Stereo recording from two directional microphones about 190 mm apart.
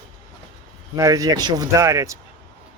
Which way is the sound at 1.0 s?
20° right (ahead or behind).